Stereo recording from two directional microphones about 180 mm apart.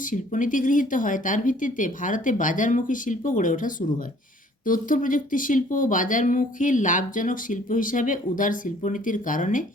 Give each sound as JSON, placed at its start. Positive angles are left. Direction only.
{"t": 0.1, "sound": "speech", "side_deg": 45}